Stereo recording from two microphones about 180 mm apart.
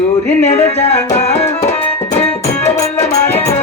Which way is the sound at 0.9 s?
10° left (ahead or behind).